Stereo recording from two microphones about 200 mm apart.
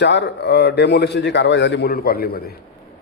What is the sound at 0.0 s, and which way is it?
Speech, 60° left (ahead or behind).